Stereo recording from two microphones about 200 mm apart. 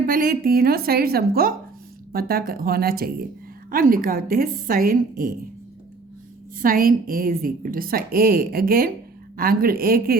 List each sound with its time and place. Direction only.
0.1 s a woman's voice: 45° right (ahead or behind)
6.6 s a woman's voice: 45° right (ahead or behind)